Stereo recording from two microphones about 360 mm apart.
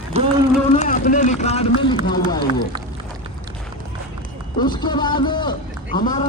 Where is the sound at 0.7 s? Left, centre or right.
Left.